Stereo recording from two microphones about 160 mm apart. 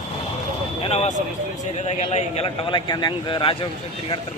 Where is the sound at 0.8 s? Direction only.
40° left (ahead or behind).